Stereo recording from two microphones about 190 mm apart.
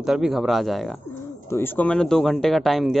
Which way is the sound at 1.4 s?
10° left (ahead or behind).